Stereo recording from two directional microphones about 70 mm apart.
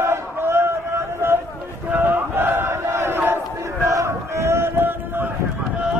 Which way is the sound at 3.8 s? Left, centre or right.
Right.